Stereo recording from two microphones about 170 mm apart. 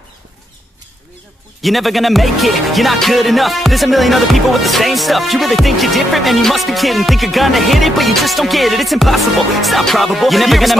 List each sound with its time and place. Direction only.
1.6 s music: centre (ahead or behind)